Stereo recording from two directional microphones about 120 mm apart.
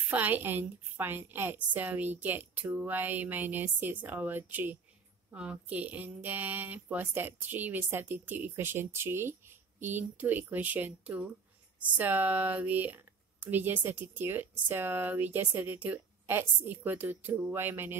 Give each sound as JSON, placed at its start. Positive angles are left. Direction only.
{"t": 0.1, "sound": "speech", "side_deg": -15}